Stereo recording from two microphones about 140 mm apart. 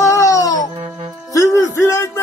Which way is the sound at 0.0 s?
20° left (ahead or behind).